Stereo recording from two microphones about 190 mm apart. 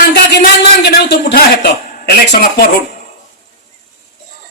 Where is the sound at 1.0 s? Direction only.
60° left (ahead or behind).